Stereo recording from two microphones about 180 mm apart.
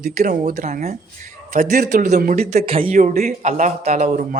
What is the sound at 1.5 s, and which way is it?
Speech, 60° right (ahead or behind).